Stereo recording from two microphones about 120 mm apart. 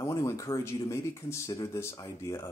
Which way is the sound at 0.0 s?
25° left (ahead or behind).